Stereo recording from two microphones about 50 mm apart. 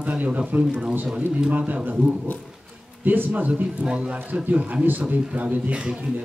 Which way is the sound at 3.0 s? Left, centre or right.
Right.